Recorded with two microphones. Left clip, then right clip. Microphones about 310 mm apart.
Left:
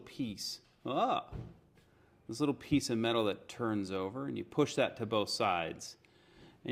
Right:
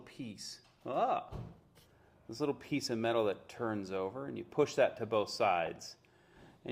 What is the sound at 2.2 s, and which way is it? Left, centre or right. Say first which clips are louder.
Speech: left 2 dB; left.